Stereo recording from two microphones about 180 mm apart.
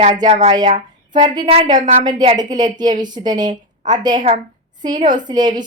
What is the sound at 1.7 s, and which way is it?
Speech, 45° right (ahead or behind).